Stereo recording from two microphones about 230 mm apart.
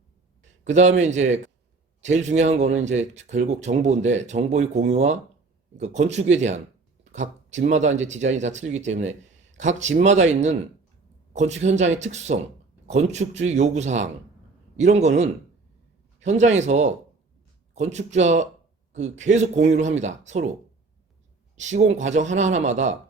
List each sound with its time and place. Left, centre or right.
0.6 s a man's voice: right
21.6 s speech: right